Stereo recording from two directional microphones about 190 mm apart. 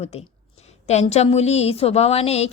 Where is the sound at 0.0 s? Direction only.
35° left (ahead or behind).